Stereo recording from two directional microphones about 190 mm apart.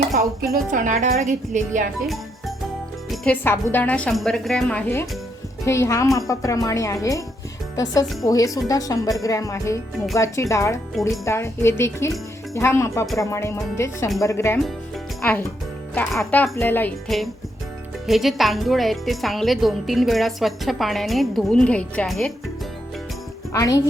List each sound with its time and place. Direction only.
0.5 s a woman's voice: 45° right (ahead or behind)
3.1 s a woman's voice: 10° left (ahead or behind)
8.2 s a woman's voice: 20° left (ahead or behind); by 22.3 s centre (ahead or behind)
23.5 s a woman's voice: 20° left (ahead or behind)